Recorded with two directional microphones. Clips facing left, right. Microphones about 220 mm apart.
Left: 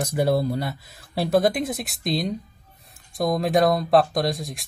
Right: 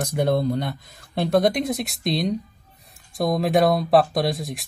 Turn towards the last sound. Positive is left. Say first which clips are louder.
# right 1 dB
turn(degrees=0)  # may be behind; listen again after turning